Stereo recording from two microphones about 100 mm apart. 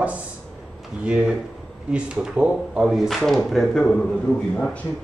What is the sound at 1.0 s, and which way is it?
Speech, 10° right (ahead or behind).